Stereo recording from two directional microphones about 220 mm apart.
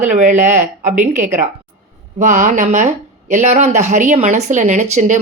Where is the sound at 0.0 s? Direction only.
35° right (ahead or behind).